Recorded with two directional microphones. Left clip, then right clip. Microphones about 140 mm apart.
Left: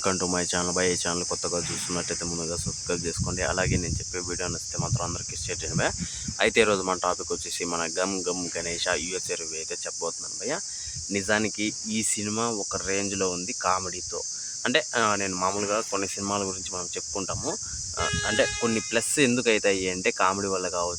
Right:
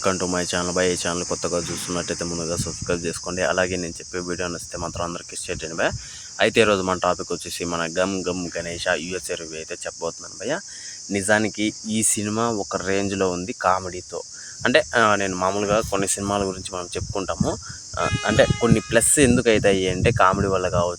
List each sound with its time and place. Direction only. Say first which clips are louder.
0.0 s cricket: right 4 dB; 20° right (ahead or behind)
11.1 s speech: right 6 dB; 25° right (ahead or behind)
18.2 s speech: right 7 dB; 55° right (ahead or behind)